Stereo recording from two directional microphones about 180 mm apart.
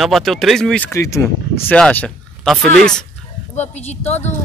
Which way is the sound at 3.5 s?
40° left (ahead or behind).